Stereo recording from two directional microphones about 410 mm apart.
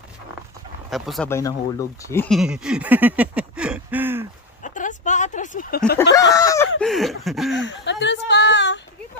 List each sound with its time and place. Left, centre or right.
0.8 s speech: centre
4.6 s speech: centre
6.3 s chicken: centre
6.8 s speech: centre
7.6 s a sound: left